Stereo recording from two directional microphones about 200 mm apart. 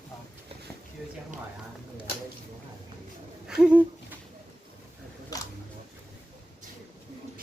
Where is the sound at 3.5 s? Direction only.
5° right (ahead or behind).